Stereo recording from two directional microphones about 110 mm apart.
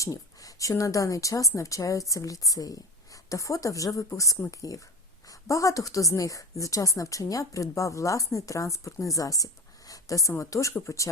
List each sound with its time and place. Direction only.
0.0 s a woman's voice: 30° left (ahead or behind)